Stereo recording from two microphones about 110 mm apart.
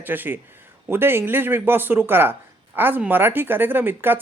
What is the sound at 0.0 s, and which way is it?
Speech, 15° right (ahead or behind).